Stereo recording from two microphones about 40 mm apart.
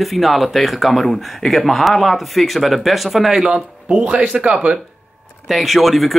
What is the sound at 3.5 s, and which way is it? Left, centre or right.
Speech, right.